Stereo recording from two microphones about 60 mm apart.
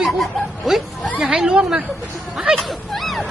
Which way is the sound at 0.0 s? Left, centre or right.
Centre.